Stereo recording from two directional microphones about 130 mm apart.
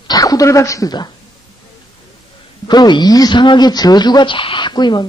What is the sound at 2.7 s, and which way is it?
Speech, 35° left (ahead or behind).